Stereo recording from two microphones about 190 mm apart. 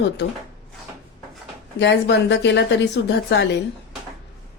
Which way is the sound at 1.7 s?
65° left (ahead or behind).